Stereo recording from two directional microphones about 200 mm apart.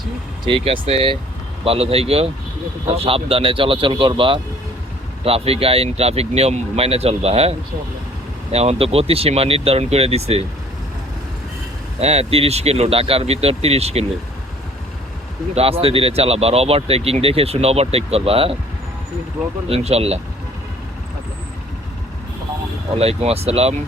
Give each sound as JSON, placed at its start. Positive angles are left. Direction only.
{"t": 0.4, "sound": "speech", "side_deg": -25}
{"t": 8.5, "sound": "speech", "side_deg": -30}
{"t": 11.9, "sound": "speech", "side_deg": -30}
{"t": 15.5, "sound": "speech", "side_deg": -30}
{"t": 19.6, "sound": "speech", "side_deg": -30}
{"t": 23.0, "sound": "speech", "side_deg": -30}